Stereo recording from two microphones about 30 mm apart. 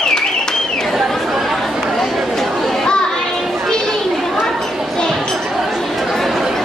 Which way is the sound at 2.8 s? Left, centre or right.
Left.